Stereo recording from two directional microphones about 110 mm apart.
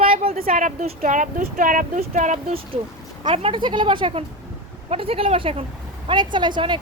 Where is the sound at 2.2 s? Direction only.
90° right.